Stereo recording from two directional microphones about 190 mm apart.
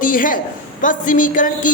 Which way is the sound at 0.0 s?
45° left (ahead or behind).